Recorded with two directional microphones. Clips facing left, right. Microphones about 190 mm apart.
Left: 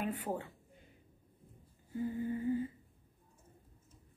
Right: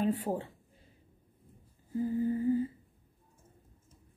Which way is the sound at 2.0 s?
30° right (ahead or behind).